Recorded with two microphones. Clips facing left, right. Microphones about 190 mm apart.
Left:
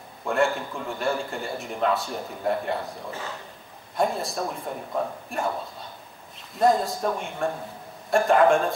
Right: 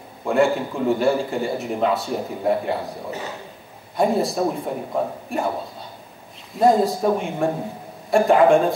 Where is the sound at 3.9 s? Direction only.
Centre (ahead or behind).